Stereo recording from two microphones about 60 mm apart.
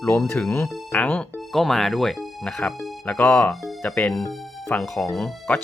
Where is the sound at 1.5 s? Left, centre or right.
Centre.